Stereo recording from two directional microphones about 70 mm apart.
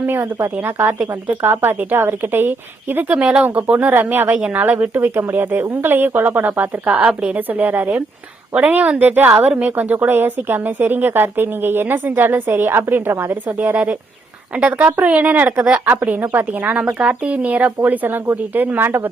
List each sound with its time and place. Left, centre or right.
0.0 s a woman's voice: right
9.3 s a woman's voice: centre
9.6 s a woman's voice: right